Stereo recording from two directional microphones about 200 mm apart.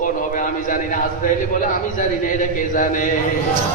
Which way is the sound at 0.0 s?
40° left (ahead or behind).